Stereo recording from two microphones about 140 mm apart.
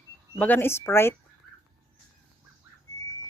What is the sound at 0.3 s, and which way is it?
Speech, 10° left (ahead or behind).